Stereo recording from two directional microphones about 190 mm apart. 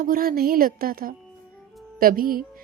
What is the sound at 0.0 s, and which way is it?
Speech, 50° right (ahead or behind).